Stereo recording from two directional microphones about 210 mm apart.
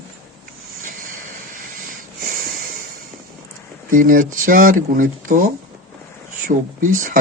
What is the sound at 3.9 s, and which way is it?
Speech, 40° right (ahead or behind).